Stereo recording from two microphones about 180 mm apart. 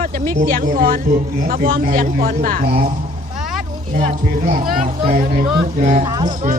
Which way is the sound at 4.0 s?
45° right (ahead or behind).